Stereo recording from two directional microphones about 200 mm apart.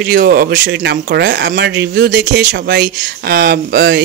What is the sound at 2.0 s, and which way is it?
Speech, 45° right (ahead or behind).